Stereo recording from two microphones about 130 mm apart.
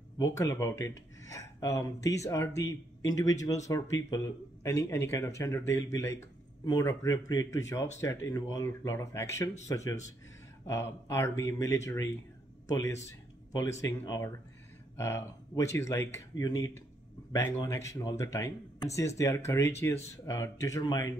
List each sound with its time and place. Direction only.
0.2 s speech: 25° left (ahead or behind)